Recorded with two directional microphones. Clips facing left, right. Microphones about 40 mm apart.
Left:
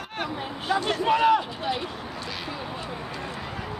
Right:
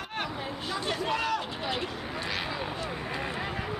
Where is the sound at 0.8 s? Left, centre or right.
Left.